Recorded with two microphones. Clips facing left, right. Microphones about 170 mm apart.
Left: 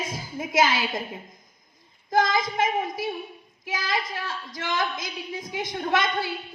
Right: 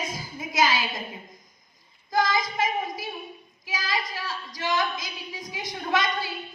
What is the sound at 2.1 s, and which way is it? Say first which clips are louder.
Speech: left 2 dB; 50° left (ahead or behind).